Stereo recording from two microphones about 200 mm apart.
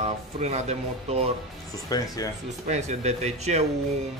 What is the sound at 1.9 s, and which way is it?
Speech, 20° left (ahead or behind).